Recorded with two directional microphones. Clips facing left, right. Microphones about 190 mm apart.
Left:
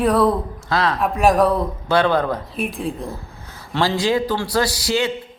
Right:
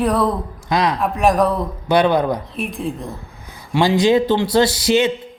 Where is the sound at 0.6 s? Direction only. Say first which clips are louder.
Right 3 dB; 15° right (ahead or behind).